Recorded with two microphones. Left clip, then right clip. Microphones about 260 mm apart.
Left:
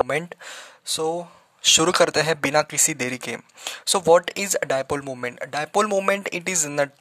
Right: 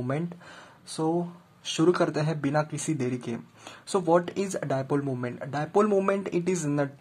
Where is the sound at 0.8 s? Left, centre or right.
Left.